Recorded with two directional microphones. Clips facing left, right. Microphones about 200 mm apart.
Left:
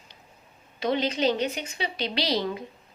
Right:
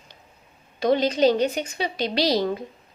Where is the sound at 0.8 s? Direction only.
40° right (ahead or behind).